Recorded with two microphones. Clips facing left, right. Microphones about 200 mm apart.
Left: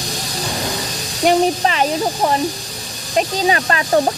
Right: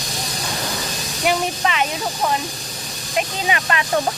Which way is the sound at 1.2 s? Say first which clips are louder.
Left 6 dB; 35° left (ahead or behind).